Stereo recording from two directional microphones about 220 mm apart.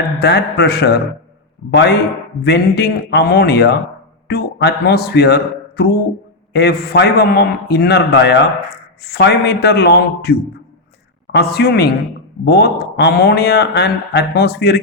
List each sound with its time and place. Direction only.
0.2 s speech: 50° left (ahead or behind)